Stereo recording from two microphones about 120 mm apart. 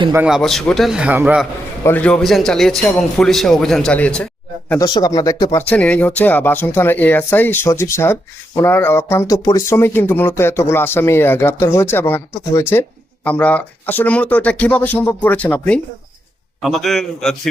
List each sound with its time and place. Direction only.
0.3 s a man's voice: centre (ahead or behind)
1.8 s a man's voice: 15° left (ahead or behind)
4.8 s speech: 30° left (ahead or behind)
5.5 s speech: 15° left (ahead or behind)
16.6 s a man's voice: centre (ahead or behind)